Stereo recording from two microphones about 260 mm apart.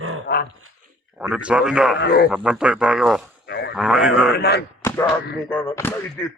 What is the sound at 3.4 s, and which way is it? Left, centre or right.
Speech, left.